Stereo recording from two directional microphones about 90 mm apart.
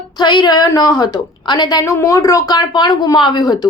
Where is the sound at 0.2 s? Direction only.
50° left (ahead or behind).